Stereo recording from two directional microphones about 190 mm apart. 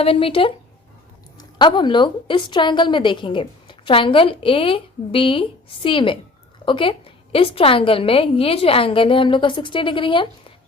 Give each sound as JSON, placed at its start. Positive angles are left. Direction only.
{"t": 0.0, "sound": "a woman's voice", "side_deg": 30}